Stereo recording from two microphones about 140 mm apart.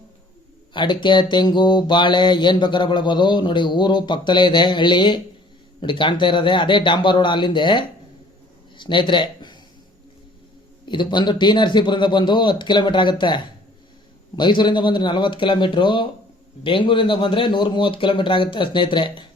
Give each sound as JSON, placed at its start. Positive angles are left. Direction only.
{"t": 0.7, "sound": "mantra", "side_deg": 35}
{"t": 8.8, "sound": "speech", "side_deg": 35}
{"t": 10.8, "sound": "mantra", "side_deg": 35}